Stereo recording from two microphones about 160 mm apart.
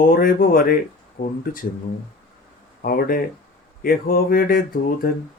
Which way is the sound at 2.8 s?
65° left (ahead or behind).